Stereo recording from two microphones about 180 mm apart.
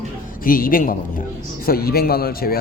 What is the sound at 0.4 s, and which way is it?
A man's voice, 50° left (ahead or behind).